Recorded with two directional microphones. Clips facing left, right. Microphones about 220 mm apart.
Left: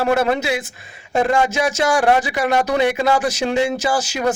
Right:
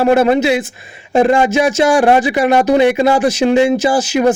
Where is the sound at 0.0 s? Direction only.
25° right (ahead or behind).